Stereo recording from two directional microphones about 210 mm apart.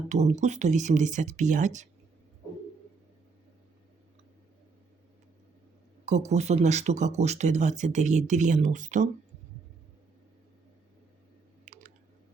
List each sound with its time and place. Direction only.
0.1 s speech: 35° right (ahead or behind)
6.1 s speech: 35° right (ahead or behind)
11.6 s squish: 35° right (ahead or behind)